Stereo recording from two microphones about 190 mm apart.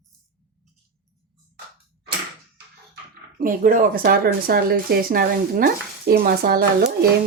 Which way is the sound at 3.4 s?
45° right (ahead or behind).